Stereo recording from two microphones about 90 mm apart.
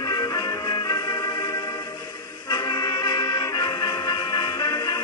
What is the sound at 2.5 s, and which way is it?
Music, 50° left (ahead or behind).